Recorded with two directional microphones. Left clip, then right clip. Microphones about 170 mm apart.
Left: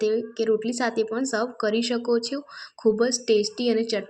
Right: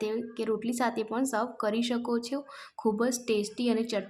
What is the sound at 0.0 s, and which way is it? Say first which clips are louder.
A woman's voice: left 8 dB; 15° left (ahead or behind).